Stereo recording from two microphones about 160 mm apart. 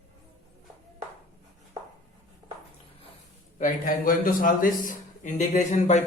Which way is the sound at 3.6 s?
55° left (ahead or behind).